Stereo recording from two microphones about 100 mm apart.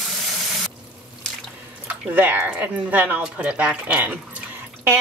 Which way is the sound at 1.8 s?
15° right (ahead or behind).